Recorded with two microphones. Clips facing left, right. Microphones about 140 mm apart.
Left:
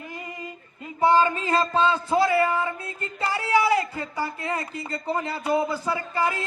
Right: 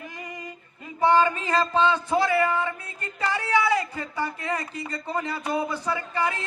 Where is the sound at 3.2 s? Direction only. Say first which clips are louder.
Left 1 dB; 25° left (ahead or behind).